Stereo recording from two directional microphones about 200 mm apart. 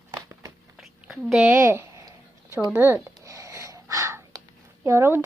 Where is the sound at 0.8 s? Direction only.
5° right (ahead or behind).